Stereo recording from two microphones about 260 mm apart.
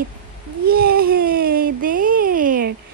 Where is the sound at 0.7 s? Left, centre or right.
Right.